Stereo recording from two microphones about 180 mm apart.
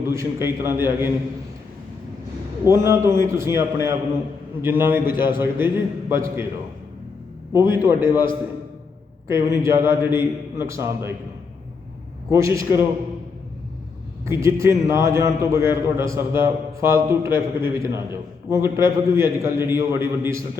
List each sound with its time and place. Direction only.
0.0 s a man's voice: 15° right (ahead or behind)
2.6 s a man's voice: 15° right (ahead or behind)
7.7 s a man's voice: 10° right (ahead or behind)
12.3 s a man's voice: 15° right (ahead or behind)
14.3 s a man's voice: 15° right (ahead or behind)